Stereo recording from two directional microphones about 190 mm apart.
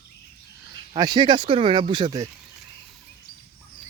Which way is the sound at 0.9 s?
25° right (ahead or behind).